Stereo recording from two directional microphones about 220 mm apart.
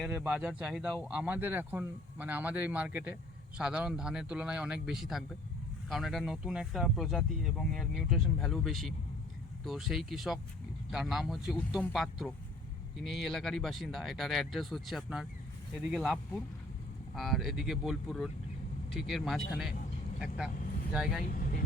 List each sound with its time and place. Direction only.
0.0 s speech: 5° right (ahead or behind)
21.2 s speech: 40° left (ahead or behind)